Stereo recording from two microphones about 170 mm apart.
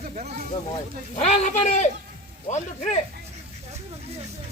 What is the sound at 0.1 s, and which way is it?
Speech, 45° right (ahead or behind).